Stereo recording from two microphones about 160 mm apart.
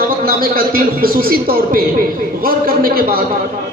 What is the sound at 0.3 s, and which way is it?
A man's voice, 65° right (ahead or behind).